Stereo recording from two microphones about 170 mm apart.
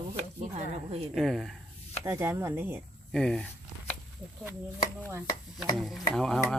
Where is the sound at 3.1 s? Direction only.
5° left (ahead or behind).